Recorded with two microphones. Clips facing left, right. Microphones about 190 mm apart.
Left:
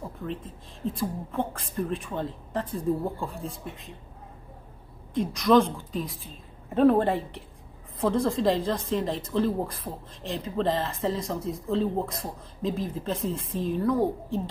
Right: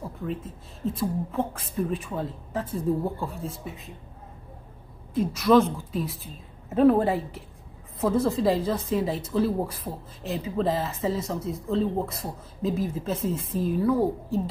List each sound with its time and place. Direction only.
0.8 s speech: 5° right (ahead or behind)
5.1 s speech: 5° right (ahead or behind)